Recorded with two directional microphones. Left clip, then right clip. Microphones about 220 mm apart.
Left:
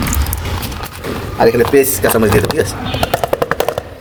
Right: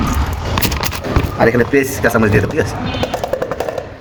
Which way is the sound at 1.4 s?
25° left (ahead or behind).